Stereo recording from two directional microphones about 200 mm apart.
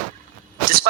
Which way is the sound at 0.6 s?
45° right (ahead or behind).